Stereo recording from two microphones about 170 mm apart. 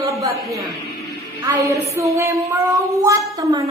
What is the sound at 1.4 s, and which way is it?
Music, 20° right (ahead or behind).